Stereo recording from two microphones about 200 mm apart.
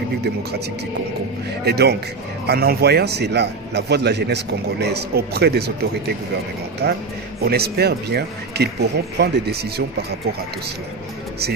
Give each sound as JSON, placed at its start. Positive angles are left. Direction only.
{"t": 1.6, "sound": "a man's voice", "side_deg": -55}